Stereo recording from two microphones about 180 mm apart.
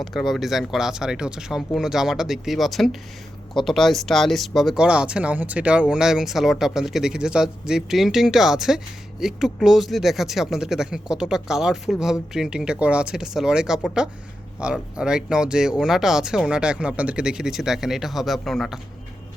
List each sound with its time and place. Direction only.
0.0 s speech: centre (ahead or behind)